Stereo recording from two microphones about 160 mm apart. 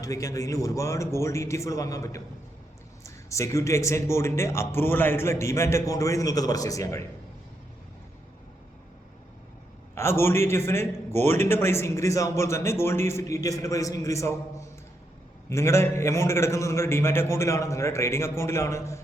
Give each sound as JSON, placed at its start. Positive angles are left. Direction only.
{"t": 0.0, "sound": "a man's voice", "side_deg": 20}
{"t": 9.9, "sound": "speech", "side_deg": 15}